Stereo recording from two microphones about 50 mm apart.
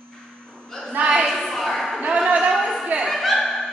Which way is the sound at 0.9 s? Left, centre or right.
Right.